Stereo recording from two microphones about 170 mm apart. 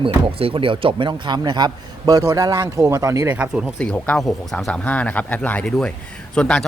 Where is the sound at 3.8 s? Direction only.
5° left (ahead or behind).